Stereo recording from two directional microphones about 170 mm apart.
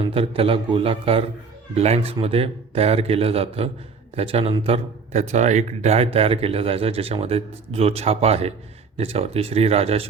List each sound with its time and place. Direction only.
0.0 s speech: 35° right (ahead or behind)